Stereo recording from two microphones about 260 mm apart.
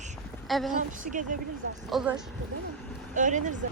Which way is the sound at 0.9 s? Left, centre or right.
Right.